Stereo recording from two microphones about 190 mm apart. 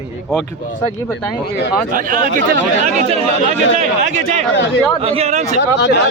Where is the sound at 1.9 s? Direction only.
45° right (ahead or behind).